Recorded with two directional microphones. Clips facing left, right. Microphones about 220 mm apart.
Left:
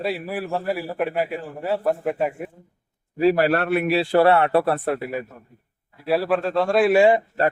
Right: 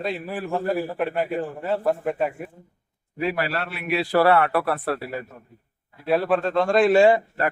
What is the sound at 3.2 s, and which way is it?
Speech, 35° left (ahead or behind).